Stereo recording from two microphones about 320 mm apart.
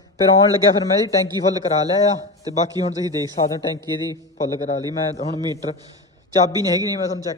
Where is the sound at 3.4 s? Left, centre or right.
Centre.